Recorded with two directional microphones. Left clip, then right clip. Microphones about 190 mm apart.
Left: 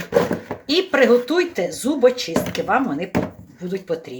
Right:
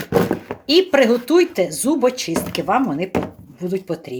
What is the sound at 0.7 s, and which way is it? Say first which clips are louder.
Speech: right 1 dB; 50° right (ahead or behind).